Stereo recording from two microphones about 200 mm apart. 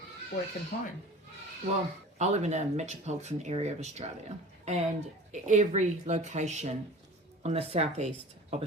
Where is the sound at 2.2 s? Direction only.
35° right (ahead or behind).